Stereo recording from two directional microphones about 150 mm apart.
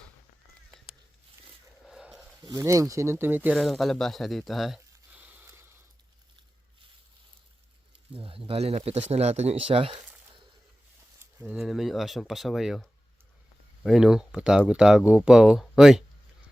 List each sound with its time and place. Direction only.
1.9 s a sound: 5° right (ahead or behind)
2.4 s speech: 20° right (ahead or behind)
3.5 s speech: centre (ahead or behind)
8.1 s speech: 40° right (ahead or behind)
11.2 s speech: 10° right (ahead or behind)